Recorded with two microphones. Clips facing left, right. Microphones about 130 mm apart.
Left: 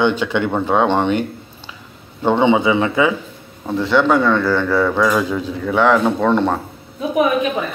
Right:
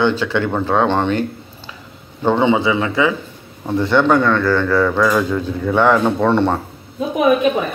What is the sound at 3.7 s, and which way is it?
Speech, centre (ahead or behind).